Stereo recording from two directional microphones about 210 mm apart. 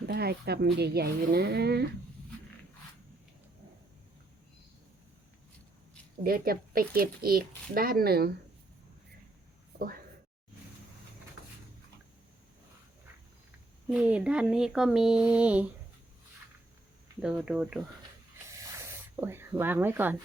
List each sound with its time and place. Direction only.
0.0 s speech: 50° right (ahead or behind)
6.2 s speech: 45° right (ahead or behind)
9.7 s a woman's voice: 45° right (ahead or behind)
13.9 s speech: 5° right (ahead or behind)
17.2 s speech: 5° right (ahead or behind)
18.8 s spray: 10° right (ahead or behind)